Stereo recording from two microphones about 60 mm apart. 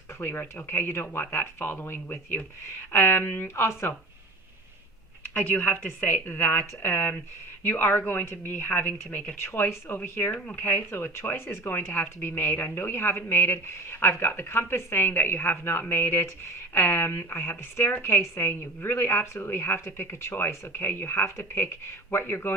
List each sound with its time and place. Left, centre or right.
0.2 s a woman's voice: left
5.3 s a woman's voice: left
9.4 s a woman's voice: left